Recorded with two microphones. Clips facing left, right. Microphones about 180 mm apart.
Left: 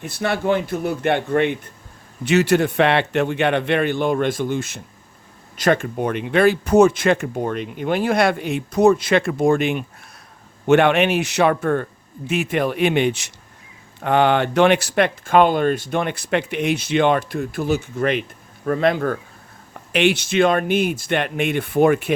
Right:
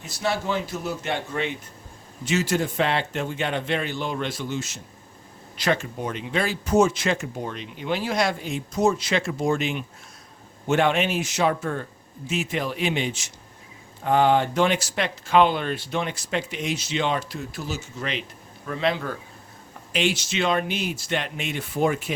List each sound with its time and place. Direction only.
0.0 s speech: 60° left (ahead or behind)
10.7 s speech: 65° left (ahead or behind)
19.9 s speech: 65° left (ahead or behind)